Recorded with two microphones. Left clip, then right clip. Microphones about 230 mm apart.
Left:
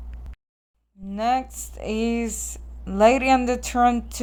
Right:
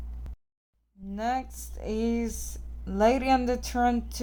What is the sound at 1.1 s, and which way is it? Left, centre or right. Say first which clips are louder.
Speech: left 7 dB; centre.